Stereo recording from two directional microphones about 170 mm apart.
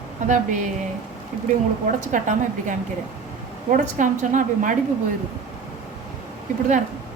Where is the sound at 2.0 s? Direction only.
50° right (ahead or behind).